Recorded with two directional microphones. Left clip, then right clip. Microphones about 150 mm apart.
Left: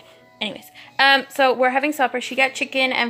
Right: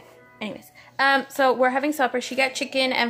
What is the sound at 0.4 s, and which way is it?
A woman's voice, 5° left (ahead or behind).